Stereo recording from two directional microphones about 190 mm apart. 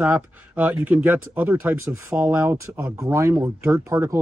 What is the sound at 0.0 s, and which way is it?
Speech, 10° right (ahead or behind).